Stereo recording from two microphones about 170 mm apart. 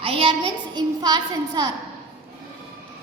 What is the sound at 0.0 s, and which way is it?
A woman's voice, 35° right (ahead or behind).